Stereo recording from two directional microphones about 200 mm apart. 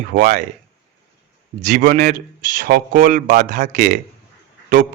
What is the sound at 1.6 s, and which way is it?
A man's voice, 40° right (ahead or behind).